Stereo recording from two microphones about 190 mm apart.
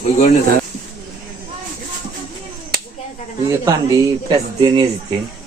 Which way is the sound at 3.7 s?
20° right (ahead or behind).